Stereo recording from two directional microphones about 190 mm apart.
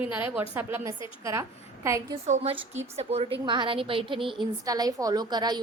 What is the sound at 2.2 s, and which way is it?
A woman's voice, 35° right (ahead or behind).